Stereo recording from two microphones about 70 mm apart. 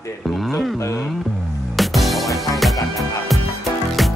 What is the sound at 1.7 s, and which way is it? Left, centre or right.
Music, centre.